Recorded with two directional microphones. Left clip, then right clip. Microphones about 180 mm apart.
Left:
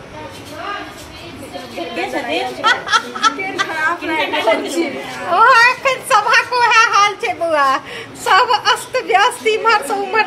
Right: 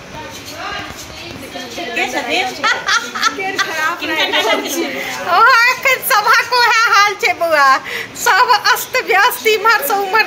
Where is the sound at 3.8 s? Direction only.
20° left (ahead or behind).